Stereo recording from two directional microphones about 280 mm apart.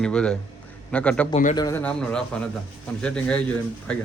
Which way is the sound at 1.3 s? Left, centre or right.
Left.